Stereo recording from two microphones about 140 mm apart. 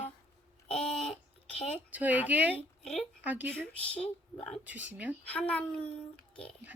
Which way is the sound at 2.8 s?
50° left (ahead or behind).